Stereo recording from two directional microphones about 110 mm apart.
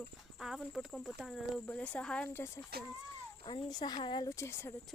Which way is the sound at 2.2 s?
20° left (ahead or behind).